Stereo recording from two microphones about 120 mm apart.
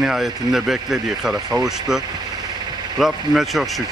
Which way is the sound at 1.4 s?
30° right (ahead or behind).